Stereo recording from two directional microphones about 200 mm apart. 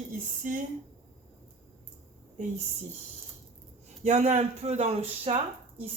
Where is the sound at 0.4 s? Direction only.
40° right (ahead or behind).